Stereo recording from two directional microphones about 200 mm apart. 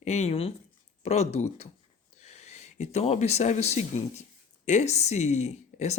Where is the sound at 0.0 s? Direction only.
35° left (ahead or behind).